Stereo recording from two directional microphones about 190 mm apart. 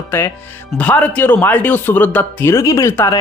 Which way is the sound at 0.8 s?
5° left (ahead or behind).